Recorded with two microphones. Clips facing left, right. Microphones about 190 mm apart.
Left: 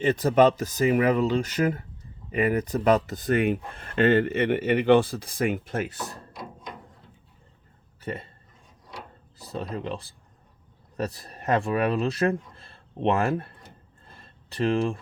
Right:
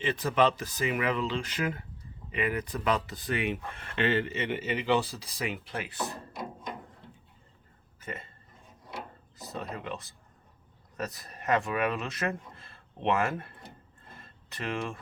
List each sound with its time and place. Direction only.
0.0 s speech: 45° left (ahead or behind)
8.0 s speech: 35° left (ahead or behind)
9.4 s speech: 30° left (ahead or behind)
14.2 s a sound: 35° left (ahead or behind)